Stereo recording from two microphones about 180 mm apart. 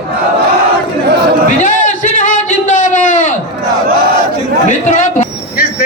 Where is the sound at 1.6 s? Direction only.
45° left (ahead or behind).